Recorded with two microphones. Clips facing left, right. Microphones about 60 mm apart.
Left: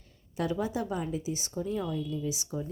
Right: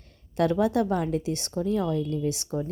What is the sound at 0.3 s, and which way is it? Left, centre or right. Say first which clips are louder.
Speech: right 8 dB; right.